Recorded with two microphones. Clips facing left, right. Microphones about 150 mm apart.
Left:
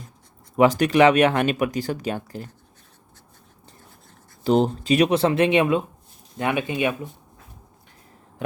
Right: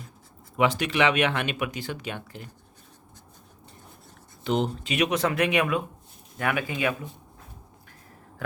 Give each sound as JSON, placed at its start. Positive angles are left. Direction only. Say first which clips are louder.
{"t": 0.5, "sound": "speech", "louder": "left 7 dB", "side_deg": 40}
{"t": 4.4, "sound": "speech", "louder": "left 7 dB", "side_deg": 35}
{"t": 8.4, "sound": "a sound", "louder": "left 4 dB", "side_deg": 20}